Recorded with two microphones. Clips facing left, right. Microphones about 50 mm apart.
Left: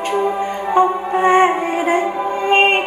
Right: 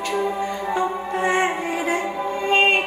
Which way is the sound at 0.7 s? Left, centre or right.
Left.